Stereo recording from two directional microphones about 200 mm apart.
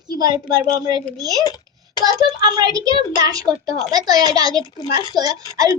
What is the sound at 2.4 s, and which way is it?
A child's voice, 20° right (ahead or behind).